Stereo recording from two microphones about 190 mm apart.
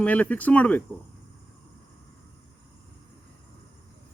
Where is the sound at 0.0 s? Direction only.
10° left (ahead or behind).